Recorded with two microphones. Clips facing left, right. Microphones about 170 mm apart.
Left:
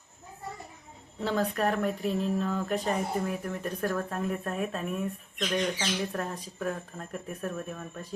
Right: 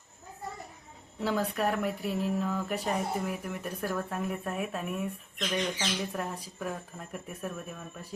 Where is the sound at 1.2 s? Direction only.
10° right (ahead or behind).